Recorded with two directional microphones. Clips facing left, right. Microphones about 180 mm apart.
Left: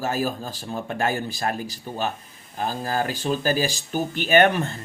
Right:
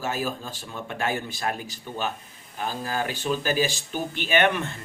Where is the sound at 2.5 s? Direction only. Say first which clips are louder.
Left 3 dB; 40° left (ahead or behind).